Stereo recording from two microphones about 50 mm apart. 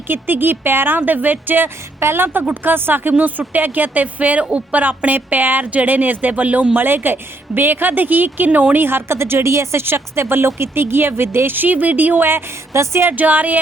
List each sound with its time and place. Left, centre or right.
0.1 s a woman's voice: right
6.7 s a woman's voice: right
9.8 s speech: right
12.7 s a woman's voice: right
13.1 s a woman's voice: right